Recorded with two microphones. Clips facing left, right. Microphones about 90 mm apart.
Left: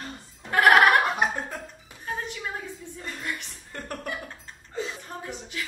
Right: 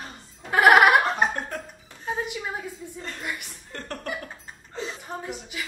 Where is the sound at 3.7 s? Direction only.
10° left (ahead or behind).